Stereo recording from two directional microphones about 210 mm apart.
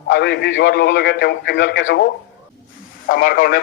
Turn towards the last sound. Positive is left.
turn(degrees=45)  # may be behind; listen again after turning